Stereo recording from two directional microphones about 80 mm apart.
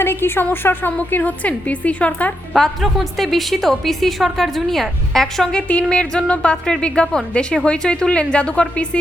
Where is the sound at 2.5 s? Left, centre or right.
Centre.